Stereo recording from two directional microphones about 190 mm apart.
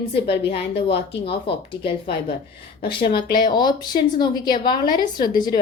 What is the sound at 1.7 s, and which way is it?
Speech, 25° left (ahead or behind).